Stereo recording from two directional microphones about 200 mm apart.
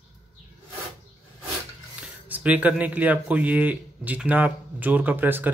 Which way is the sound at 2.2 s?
5° right (ahead or behind).